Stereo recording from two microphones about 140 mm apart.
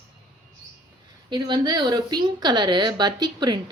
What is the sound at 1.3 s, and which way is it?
A woman's voice, 30° right (ahead or behind).